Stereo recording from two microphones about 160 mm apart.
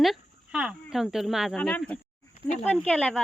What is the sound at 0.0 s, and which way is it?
Speech, centre (ahead or behind).